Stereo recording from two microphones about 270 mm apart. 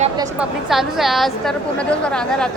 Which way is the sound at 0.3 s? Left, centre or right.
Centre.